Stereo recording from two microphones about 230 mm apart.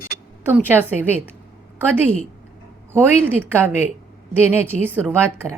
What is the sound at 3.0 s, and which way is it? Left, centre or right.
A woman's voice, centre.